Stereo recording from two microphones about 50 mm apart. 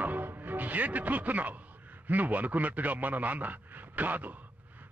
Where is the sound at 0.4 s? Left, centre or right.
Right.